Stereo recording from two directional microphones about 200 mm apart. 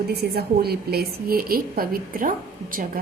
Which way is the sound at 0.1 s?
50° right (ahead or behind).